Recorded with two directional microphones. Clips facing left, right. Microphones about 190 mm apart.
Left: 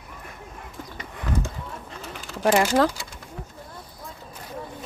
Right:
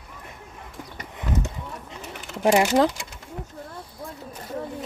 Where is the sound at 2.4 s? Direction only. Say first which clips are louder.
Right 1 dB; 20° right (ahead or behind).